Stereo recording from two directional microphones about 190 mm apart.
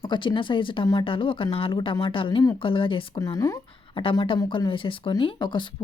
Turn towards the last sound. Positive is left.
turn(degrees=25)  # may be behind; listen again after turning